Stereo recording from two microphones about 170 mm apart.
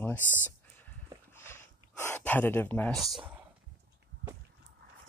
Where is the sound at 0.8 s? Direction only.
15° left (ahead or behind).